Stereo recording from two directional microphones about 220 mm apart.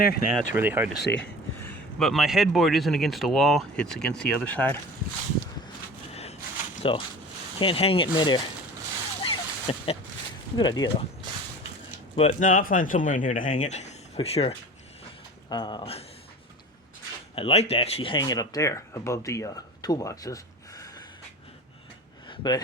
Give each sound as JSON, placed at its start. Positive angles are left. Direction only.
{"t": 0.0, "sound": "speech", "side_deg": 40}
{"t": 0.5, "sound": "speech", "side_deg": -10}
{"t": 1.0, "sound": "speech", "side_deg": 50}
{"t": 1.6, "sound": "a man's voice", "side_deg": 5}
{"t": 6.9, "sound": "speech", "side_deg": 20}
{"t": 9.2, "sound": "a sound", "side_deg": 25}
{"t": 10.6, "sound": "speech", "side_deg": 20}
{"t": 12.1, "sound": "speech", "side_deg": 30}
{"t": 17.3, "sound": "speech", "side_deg": 25}
{"t": 22.3, "sound": "a sound", "side_deg": 20}